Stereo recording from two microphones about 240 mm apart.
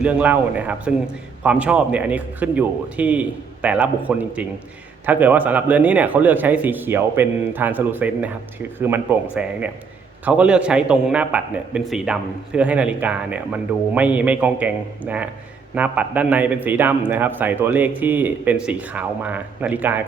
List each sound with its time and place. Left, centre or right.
0.0 s a man's voice: centre